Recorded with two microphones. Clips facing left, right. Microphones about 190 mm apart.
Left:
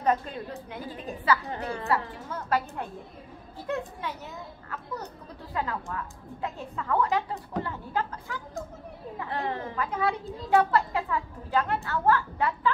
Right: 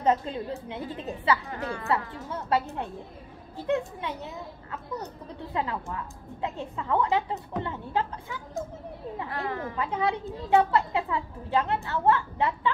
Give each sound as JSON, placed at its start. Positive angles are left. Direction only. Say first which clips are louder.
{"t": 0.0, "sound": "a woman's voice", "louder": "right 2 dB", "side_deg": -25}
{"t": 1.5, "sound": "a woman's voice", "louder": "even", "side_deg": 25}
{"t": 1.9, "sound": "a woman's voice", "louder": "even", "side_deg": -25}
{"t": 5.5, "sound": "a woman's voice", "louder": "right 1 dB", "side_deg": -20}
{"t": 9.3, "sound": "a woman's voice", "louder": "left 3 dB", "side_deg": 25}
{"t": 9.8, "sound": "a woman's voice", "louder": "right 1 dB", "side_deg": -25}